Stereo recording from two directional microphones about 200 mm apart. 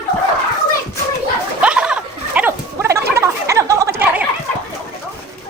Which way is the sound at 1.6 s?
5° right (ahead or behind).